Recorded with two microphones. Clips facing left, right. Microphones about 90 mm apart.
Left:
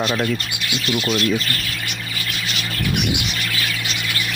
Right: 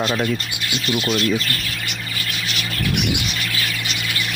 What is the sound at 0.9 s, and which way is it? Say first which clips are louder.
Speech: even; centre (ahead or behind).